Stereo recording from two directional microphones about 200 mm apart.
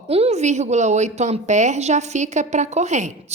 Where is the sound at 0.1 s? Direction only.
30° right (ahead or behind).